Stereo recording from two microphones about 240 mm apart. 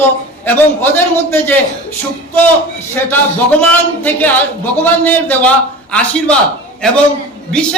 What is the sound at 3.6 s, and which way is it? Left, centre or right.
A man's voice, centre.